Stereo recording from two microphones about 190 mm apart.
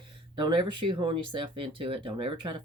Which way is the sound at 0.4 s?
25° right (ahead or behind).